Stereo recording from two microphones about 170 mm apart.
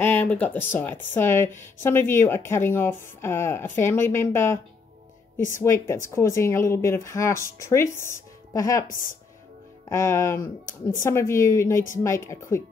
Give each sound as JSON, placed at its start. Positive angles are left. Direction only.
{"t": 0.0, "sound": "speech", "side_deg": 10}
{"t": 5.6, "sound": "speech", "side_deg": 15}
{"t": 9.8, "sound": "speech", "side_deg": 15}
{"t": 10.6, "sound": "speech", "side_deg": 50}
{"t": 11.1, "sound": "speech", "side_deg": 15}